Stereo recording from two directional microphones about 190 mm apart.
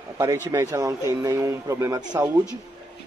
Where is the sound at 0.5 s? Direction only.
15° right (ahead or behind).